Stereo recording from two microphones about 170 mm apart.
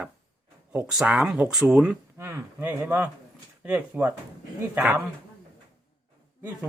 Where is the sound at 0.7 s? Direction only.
5° right (ahead or behind).